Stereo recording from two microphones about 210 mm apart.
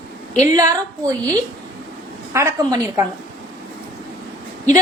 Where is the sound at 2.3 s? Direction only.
15° right (ahead or behind).